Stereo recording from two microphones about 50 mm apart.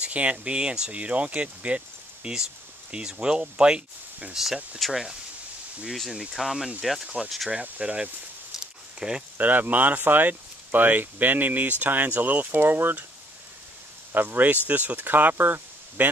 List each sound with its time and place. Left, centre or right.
0.0 s speech: right
4.8 s speech: centre
6.3 s speech: centre
7.8 s speech: right
8.5 s a sound: centre
9.4 s speech: right
14.1 s speech: right